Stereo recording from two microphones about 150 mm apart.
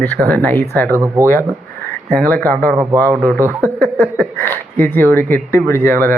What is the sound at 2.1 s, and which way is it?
Speech, 10° left (ahead or behind).